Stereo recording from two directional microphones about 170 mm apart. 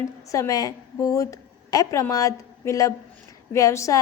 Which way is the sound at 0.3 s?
20° left (ahead or behind).